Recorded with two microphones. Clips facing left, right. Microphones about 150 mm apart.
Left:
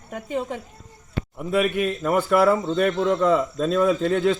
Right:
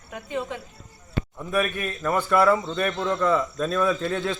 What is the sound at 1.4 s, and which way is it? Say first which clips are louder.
Speech: left 5 dB; 15° left (ahead or behind).